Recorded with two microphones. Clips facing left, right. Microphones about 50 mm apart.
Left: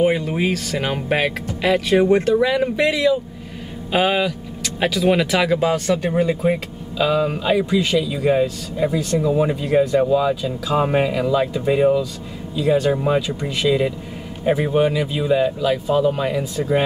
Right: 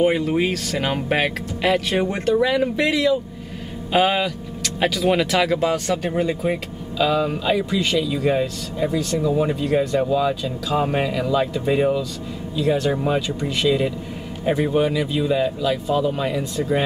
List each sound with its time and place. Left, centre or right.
0.0 s speech: centre